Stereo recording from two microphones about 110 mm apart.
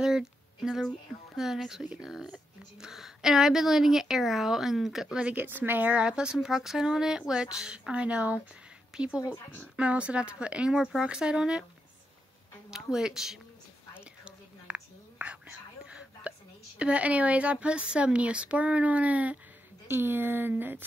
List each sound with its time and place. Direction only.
0.0 s a sound: 5° right (ahead or behind)
1.3 s speech: 5° right (ahead or behind)
12.7 s speech: 5° right (ahead or behind)
14.2 s whispering: 10° right (ahead or behind)
19.9 s speech: 20° right (ahead or behind)